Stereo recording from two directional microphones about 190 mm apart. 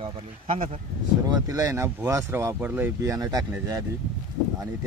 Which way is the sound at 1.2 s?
15° right (ahead or behind).